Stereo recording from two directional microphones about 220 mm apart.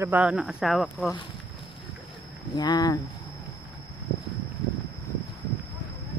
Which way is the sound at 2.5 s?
15° left (ahead or behind).